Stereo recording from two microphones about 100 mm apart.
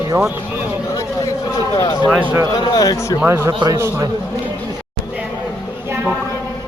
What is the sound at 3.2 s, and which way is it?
Speech, 25° right (ahead or behind).